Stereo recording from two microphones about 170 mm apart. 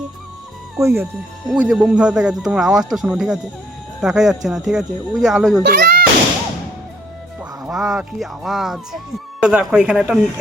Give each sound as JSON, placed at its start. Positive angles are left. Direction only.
{"t": 0.8, "sound": "speech", "side_deg": -15}
{"t": 1.5, "sound": "speech", "side_deg": -5}
{"t": 5.6, "sound": "a sound", "side_deg": -65}
{"t": 7.6, "sound": "speech", "side_deg": 0}